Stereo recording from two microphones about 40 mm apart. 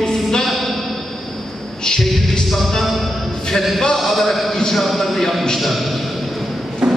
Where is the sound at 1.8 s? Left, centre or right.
Centre.